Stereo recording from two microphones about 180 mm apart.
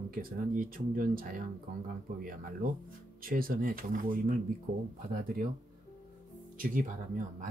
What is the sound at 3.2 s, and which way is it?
Speech, 50° right (ahead or behind).